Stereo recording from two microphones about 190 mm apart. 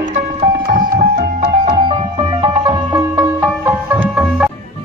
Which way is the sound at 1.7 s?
25° right (ahead or behind).